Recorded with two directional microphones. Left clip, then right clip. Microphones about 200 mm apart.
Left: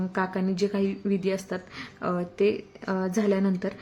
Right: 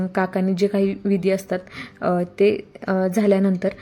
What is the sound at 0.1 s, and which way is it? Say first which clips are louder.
Speech: right 6 dB; 25° right (ahead or behind).